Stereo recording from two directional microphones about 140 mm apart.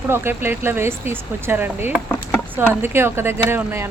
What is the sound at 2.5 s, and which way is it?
Speech, 15° right (ahead or behind).